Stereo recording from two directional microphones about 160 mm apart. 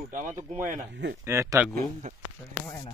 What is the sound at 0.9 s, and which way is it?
Speech, 90° right.